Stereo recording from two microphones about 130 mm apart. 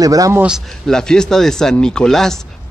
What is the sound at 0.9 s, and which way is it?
Speech, 5° left (ahead or behind).